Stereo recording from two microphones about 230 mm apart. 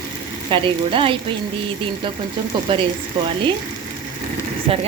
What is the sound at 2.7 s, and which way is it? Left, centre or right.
Speech, right.